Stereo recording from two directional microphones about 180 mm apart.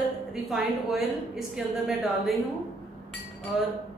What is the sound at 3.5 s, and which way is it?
Speech, centre (ahead or behind).